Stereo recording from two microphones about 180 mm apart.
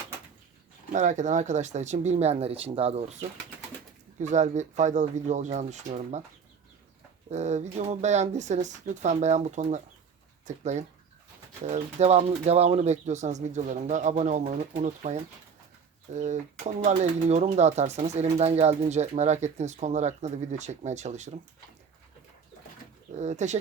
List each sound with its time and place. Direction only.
0.9 s speech: 40° right (ahead or behind)
7.3 s speech: 40° right (ahead or behind)
23.1 s speech: 40° right (ahead or behind)